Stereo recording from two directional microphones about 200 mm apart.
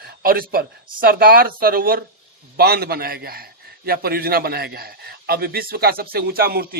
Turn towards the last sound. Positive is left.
turn(degrees=-50)  # may be behind; listen again after turning